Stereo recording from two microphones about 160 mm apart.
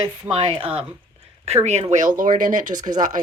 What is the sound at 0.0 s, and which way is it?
Speech, 35° right (ahead or behind).